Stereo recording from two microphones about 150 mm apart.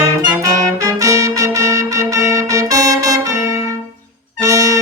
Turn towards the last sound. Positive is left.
turn(degrees=-25)  # may be behind; listen again after turning